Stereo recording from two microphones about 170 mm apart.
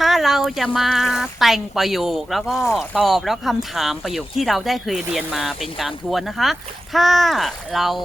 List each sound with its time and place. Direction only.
0.0 s speech: centre (ahead or behind)